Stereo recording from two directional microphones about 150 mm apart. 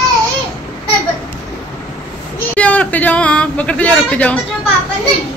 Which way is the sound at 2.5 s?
10° left (ahead or behind).